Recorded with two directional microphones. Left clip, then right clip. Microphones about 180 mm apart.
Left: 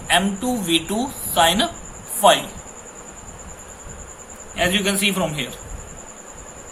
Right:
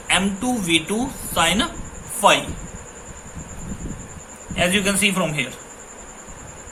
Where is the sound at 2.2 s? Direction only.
25° right (ahead or behind).